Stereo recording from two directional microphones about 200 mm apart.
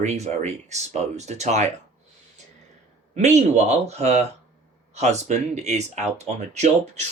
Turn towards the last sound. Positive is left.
turn(degrees=-35)  # may be behind; listen again after turning